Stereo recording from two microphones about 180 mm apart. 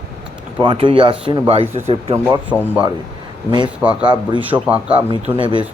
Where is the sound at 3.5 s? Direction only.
25° right (ahead or behind).